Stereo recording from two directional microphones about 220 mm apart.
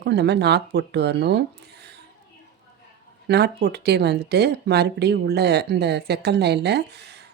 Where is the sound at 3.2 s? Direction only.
50° right (ahead or behind).